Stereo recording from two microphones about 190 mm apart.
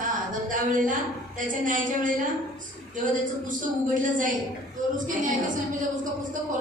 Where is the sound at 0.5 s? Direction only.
45° right (ahead or behind).